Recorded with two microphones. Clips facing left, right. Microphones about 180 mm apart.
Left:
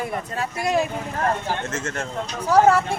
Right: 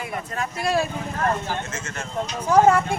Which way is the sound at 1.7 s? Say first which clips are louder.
Left 5 dB; 55° left (ahead or behind).